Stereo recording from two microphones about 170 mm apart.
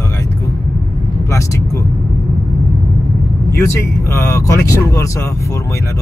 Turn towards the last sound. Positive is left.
turn(degrees=15)  # may be behind; listen again after turning